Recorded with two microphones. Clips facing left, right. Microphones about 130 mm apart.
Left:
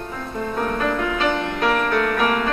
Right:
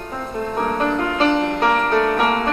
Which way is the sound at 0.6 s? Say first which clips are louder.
Right 2 dB; 30° right (ahead or behind).